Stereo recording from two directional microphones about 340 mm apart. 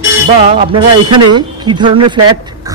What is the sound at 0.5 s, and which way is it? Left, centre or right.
A man's voice, centre.